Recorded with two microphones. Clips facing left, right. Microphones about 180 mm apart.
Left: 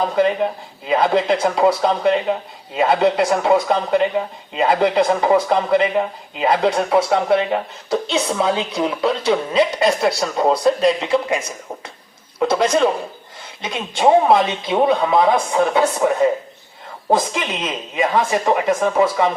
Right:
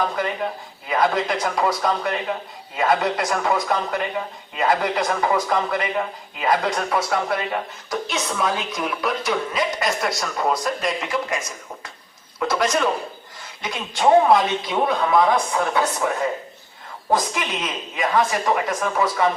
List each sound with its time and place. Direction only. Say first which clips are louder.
0.9 s speech: left 5 dB; 25° left (ahead or behind)
12.4 s speech: left 5 dB; 25° left (ahead or behind)
17.1 s speech: left 3 dB; 25° left (ahead or behind)